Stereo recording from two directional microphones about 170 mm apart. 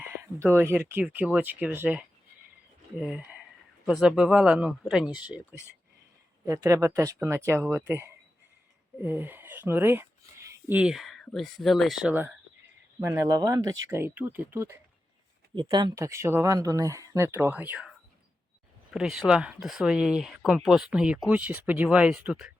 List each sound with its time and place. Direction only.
0.2 s speech: 15° right (ahead or behind)
6.4 s speech: 15° right (ahead or behind)
15.5 s speech: 25° right (ahead or behind)
18.9 s speech: centre (ahead or behind)